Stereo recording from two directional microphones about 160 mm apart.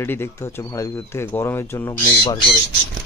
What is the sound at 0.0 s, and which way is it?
Speech, 15° left (ahead or behind).